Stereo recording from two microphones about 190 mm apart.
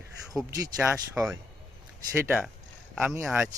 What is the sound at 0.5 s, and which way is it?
Speech, 15° right (ahead or behind).